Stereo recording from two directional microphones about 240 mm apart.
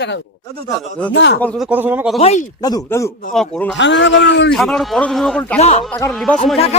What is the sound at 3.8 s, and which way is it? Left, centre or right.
Speech, left.